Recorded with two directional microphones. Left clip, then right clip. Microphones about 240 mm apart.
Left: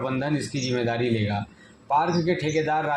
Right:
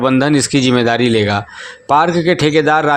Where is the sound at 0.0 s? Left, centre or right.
Right.